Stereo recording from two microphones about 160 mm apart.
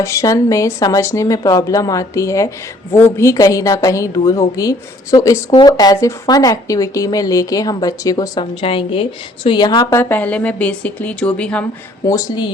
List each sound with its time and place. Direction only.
0.0 s a woman's voice: 20° left (ahead or behind)
12.0 s a woman's voice: 25° left (ahead or behind)